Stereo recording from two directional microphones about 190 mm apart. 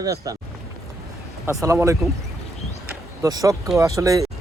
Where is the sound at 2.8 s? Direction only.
15° right (ahead or behind).